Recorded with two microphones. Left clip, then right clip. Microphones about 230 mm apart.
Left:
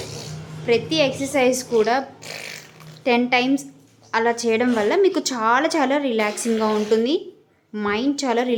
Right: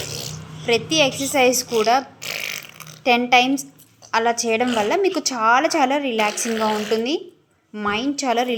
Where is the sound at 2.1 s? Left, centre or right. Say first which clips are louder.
Right 6 dB; right.